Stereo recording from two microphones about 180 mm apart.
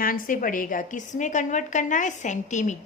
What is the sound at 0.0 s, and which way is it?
A woman's voice, 50° left (ahead or behind).